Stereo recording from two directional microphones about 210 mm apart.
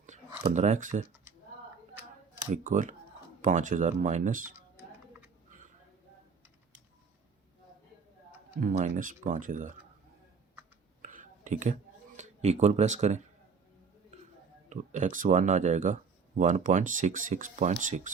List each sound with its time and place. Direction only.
0.5 s speech: 35° right (ahead or behind)
2.5 s speech: 40° right (ahead or behind)
8.6 s speech: 40° right (ahead or behind)
11.0 s a sound: 35° right (ahead or behind)
14.7 s speech: 35° right (ahead or behind)